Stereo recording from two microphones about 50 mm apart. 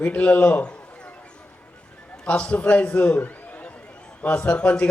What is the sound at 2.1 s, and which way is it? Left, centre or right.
A man's voice, left.